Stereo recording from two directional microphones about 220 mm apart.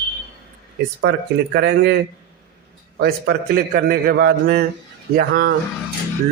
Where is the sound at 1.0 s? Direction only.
50° right (ahead or behind).